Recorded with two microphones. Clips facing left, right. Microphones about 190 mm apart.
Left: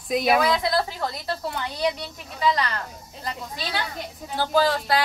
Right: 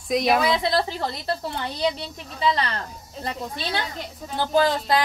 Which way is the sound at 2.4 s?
30° right (ahead or behind).